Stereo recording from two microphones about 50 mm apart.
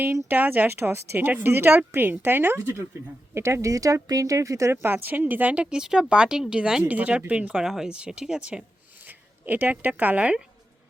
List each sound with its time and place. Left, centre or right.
0.0 s speech: right
0.7 s a woman's voice: right
3.3 s speech: right
4.7 s speech: right
5.7 s speech: centre
6.8 s speech: right
7.6 s speech: centre
9.0 s speech: right